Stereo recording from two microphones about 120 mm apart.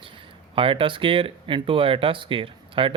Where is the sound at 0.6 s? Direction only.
45° right (ahead or behind).